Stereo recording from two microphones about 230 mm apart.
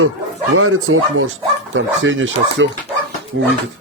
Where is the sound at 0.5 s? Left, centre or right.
Right.